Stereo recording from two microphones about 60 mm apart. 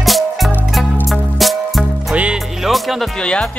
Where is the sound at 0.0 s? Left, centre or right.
Centre.